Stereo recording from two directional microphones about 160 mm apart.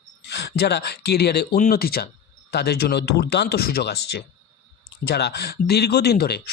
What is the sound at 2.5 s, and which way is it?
Speech, 85° left.